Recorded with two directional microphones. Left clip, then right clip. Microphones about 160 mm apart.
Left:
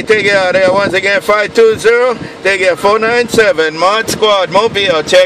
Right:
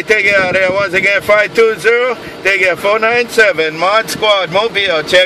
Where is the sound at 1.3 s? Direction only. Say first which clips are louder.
Left 3 dB; 25° left (ahead or behind).